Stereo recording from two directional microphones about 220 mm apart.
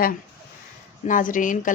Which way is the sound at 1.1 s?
35° left (ahead or behind).